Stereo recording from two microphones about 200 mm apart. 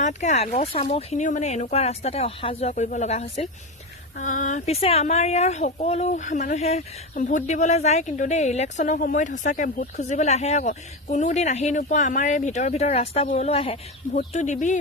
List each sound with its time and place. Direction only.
0.0 s speech: 35° left (ahead or behind)